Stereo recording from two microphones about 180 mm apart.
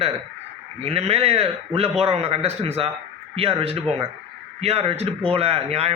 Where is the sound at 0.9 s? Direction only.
35° right (ahead or behind).